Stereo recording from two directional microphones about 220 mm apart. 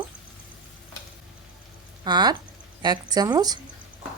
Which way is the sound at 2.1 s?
20° right (ahead or behind).